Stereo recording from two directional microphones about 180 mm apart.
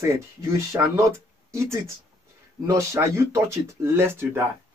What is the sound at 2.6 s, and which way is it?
Speech, 15° right (ahead or behind).